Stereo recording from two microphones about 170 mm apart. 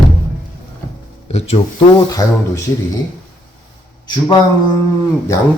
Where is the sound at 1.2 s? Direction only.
35° left (ahead or behind).